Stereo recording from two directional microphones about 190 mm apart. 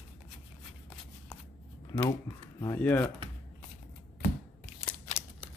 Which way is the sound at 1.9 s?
20° left (ahead or behind).